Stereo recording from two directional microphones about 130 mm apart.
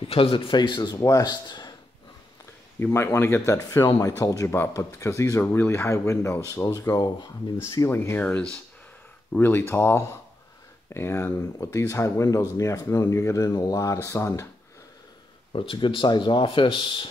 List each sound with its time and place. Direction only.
0.0 s speech: 45° left (ahead or behind)
2.8 s speech: 20° left (ahead or behind)
8.2 s speech: 10° left (ahead or behind)
15.5 s speech: 40° left (ahead or behind)